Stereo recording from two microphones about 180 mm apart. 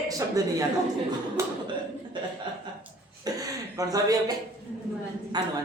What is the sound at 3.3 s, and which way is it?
Speech, 20° right (ahead or behind).